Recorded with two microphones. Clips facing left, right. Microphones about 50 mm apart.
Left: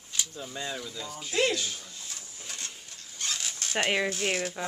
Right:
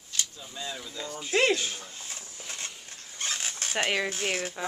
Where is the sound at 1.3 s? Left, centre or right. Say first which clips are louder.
Right 3 dB; right.